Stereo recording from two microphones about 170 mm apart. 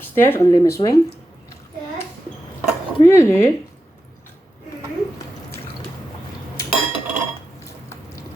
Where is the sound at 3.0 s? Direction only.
15° left (ahead or behind).